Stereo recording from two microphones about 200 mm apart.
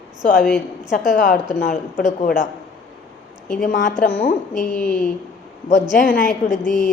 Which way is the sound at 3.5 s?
40° left (ahead or behind).